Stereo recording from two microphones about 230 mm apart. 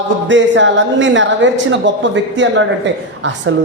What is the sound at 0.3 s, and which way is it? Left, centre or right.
A woman's voice, right.